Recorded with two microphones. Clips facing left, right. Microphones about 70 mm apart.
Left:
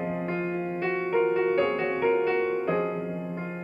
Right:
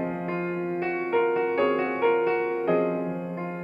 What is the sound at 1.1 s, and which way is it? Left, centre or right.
Music, centre.